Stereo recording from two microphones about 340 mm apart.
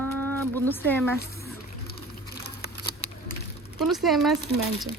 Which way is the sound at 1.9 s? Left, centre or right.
Left.